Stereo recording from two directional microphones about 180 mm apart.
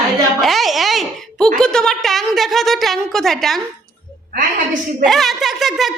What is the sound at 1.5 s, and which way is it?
A woman's voice, 5° left (ahead or behind).